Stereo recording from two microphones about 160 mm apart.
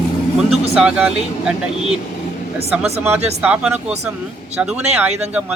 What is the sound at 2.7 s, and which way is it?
Speech, 5° right (ahead or behind).